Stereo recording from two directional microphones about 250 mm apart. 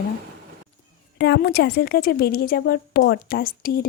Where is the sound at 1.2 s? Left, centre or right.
Left.